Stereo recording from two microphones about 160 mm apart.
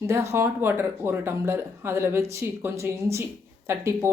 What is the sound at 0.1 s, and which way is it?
Speech, 15° right (ahead or behind).